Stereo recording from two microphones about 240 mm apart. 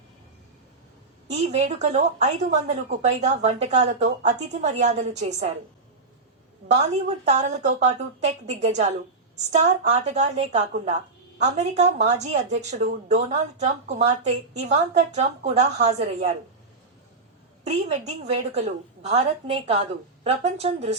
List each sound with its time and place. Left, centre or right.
1.3 s speech: right
7.3 s speech: right
17.6 s speech: right